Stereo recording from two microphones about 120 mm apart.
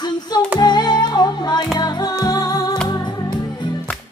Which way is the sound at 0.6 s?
35° left (ahead or behind).